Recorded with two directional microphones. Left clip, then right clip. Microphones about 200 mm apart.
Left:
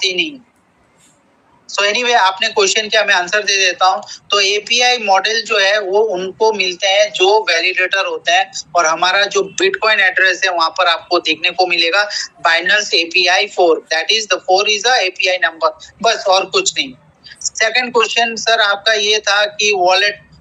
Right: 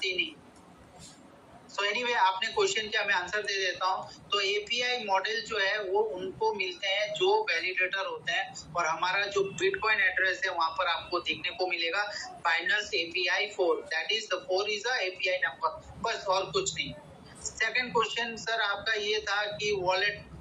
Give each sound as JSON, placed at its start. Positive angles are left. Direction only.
{"t": 0.0, "sound": "speech", "side_deg": 45}
{"t": 1.7, "sound": "speech", "side_deg": 45}